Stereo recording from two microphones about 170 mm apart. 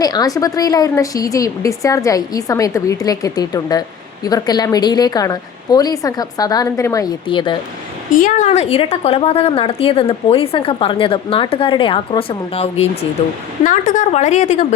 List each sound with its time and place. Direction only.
0.0 s a woman's voice: 20° left (ahead or behind)
8.1 s a woman's voice: 50° left (ahead or behind)
13.7 s a woman's voice: 50° left (ahead or behind)